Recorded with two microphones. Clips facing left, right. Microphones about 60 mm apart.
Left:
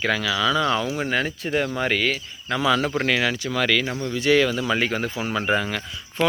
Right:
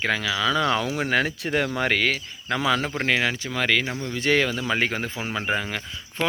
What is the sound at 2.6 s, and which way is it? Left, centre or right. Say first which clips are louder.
Speech: left 3 dB; right.